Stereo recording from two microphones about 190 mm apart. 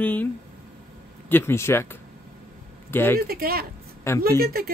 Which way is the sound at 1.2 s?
10° left (ahead or behind).